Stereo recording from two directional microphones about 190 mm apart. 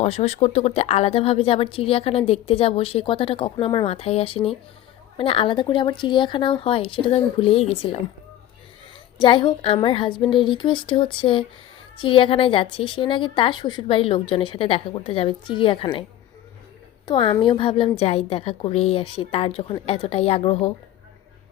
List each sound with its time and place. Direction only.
0.0 s a woman's voice: 35° left (ahead or behind)
9.1 s a woman's voice: 25° left (ahead or behind)
17.1 s a woman's voice: 25° left (ahead or behind)